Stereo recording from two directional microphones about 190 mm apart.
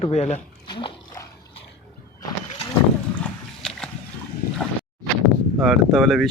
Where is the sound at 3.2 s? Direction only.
Centre (ahead or behind).